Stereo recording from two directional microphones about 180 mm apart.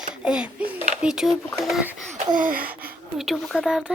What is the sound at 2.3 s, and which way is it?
Gasp, 50° right (ahead or behind).